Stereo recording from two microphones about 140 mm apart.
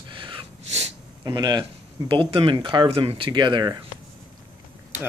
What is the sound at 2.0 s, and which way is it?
Speech, 40° right (ahead or behind).